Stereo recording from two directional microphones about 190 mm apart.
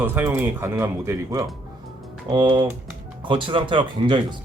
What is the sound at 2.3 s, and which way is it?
Speech, 25° right (ahead or behind).